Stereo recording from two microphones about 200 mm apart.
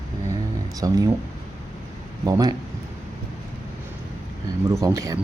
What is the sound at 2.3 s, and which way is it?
Speech, 20° right (ahead or behind).